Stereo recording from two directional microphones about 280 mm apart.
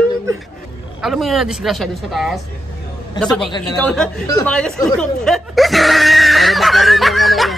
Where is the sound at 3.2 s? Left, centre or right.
Centre.